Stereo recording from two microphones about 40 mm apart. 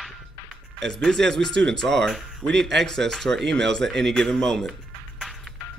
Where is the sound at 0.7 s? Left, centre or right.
Centre.